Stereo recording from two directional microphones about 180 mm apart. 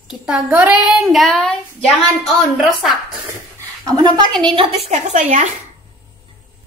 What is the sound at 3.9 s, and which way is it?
Speech, 25° right (ahead or behind).